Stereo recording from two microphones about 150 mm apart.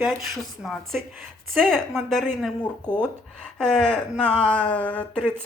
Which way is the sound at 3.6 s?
5° left (ahead or behind).